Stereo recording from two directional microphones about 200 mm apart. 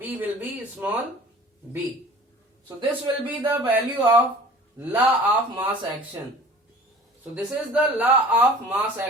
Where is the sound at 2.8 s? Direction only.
25° right (ahead or behind).